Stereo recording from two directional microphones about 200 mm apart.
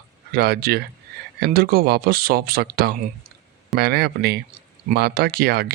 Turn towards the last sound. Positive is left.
turn(degrees=-50)  # may be behind; listen again after turning